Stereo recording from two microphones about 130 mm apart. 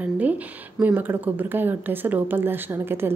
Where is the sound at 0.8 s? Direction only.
15° right (ahead or behind).